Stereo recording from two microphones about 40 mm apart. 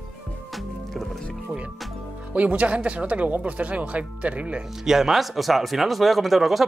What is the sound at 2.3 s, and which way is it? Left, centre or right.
Speech, right.